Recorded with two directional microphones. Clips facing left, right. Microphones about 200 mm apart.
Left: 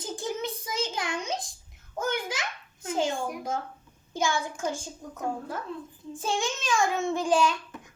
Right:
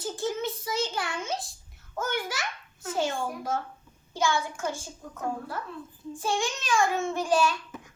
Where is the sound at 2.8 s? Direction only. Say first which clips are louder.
Left 1 dB; 15° left (ahead or behind).